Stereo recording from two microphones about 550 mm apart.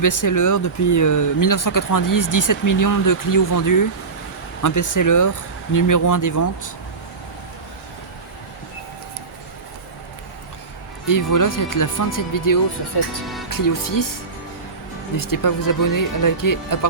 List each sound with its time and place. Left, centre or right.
0.0 s speech: left
11.0 s speech: left
15.1 s speech: left